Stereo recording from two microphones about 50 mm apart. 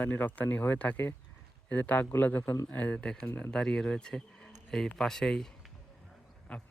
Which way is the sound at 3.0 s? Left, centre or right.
Centre.